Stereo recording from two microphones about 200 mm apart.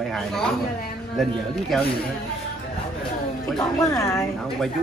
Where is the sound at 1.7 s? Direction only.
Centre (ahead or behind).